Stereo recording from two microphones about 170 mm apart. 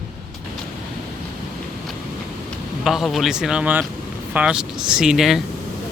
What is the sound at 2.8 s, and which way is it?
Speech, centre (ahead or behind).